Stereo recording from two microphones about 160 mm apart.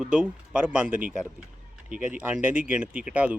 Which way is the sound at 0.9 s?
55° right (ahead or behind).